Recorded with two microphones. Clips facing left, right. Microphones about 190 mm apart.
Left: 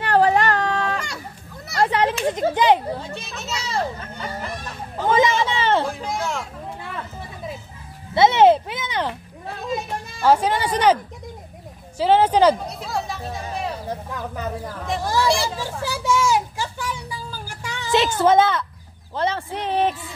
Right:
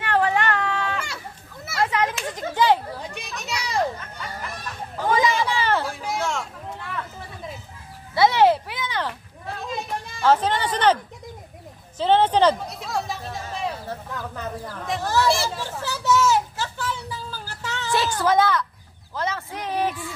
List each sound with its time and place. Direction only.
0.0 s a sound: 35° left (ahead or behind)
1.8 s a child's voice: 30° left (ahead or behind)
3.2 s a child's voice: 15° right (ahead or behind)
4.0 s speech: 35° left (ahead or behind)
5.1 s a sound: 20° left (ahead or behind)
5.9 s speech: centre (ahead or behind)
8.1 s a child's voice: 25° left (ahead or behind)
10.2 s speech: 10° left (ahead or behind)
12.0 s speech: 10° left (ahead or behind)
12.6 s a sound: centre (ahead or behind)
13.8 s speech: 15° left (ahead or behind)
15.2 s speech: centre (ahead or behind)
15.5 s a sound: 10° left (ahead or behind)